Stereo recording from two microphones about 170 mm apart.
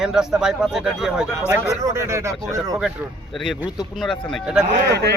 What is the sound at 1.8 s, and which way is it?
Speech, 15° right (ahead or behind).